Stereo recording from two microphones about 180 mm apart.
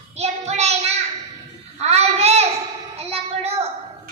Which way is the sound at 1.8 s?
35° right (ahead or behind).